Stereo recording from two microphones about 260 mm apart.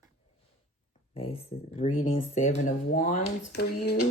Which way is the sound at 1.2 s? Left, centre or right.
Left.